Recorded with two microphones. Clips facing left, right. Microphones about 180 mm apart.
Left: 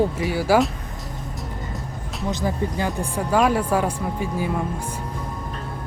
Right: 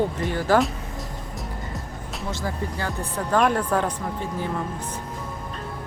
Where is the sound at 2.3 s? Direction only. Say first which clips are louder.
Left 5 dB; 15° left (ahead or behind).